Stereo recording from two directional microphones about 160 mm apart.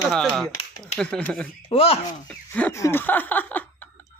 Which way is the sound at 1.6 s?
35° left (ahead or behind).